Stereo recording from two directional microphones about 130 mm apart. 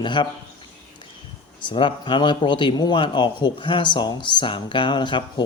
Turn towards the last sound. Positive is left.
turn(degrees=35)  # may be behind; listen again after turning